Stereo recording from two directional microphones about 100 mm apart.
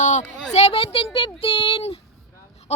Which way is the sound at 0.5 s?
80° left.